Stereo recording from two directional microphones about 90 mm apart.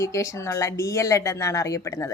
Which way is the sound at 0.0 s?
35° left (ahead or behind).